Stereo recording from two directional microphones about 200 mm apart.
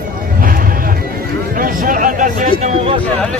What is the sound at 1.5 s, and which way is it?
Speech, 45° right (ahead or behind).